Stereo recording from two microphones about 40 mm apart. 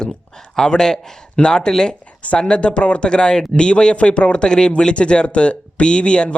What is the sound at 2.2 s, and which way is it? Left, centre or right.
Speech, left.